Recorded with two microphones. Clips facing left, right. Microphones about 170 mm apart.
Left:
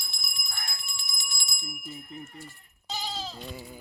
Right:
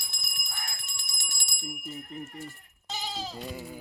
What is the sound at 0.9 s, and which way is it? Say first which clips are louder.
Bicycle bell: left 4 dB; 60° right (ahead or behind).